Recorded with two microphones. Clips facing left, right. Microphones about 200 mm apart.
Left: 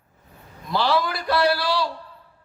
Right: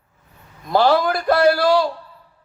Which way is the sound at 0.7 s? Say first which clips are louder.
Right 6 dB; 45° right (ahead or behind).